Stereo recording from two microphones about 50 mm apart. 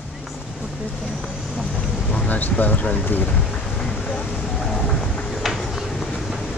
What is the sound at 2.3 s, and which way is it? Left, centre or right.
Speech, left.